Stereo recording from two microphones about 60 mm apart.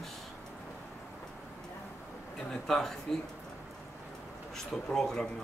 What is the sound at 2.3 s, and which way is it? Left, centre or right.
Speech, centre.